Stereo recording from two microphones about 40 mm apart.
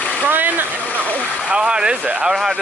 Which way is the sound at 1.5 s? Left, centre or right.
Right.